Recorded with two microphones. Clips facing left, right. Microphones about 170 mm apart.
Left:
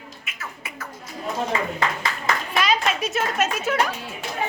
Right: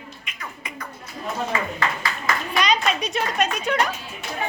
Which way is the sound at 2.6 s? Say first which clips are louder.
Right 1 dB; 5° left (ahead or behind).